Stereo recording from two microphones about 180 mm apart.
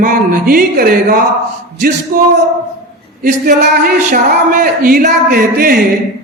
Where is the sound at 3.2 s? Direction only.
50° right (ahead or behind).